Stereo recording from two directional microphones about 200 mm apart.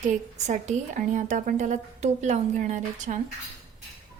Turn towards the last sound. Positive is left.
turn(degrees=-35)  # may be behind; listen again after turning